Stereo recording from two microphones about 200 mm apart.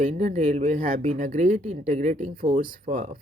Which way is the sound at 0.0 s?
35° right (ahead or behind).